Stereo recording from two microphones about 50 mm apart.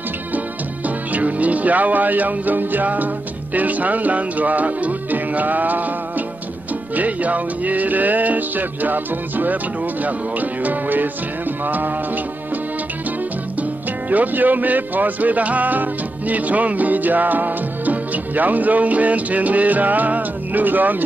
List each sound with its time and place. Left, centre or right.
0.8 s speech: right
10.6 s speech: right
14.1 s speech: right